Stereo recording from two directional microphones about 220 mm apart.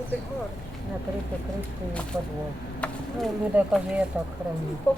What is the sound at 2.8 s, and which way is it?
Speech, centre (ahead or behind).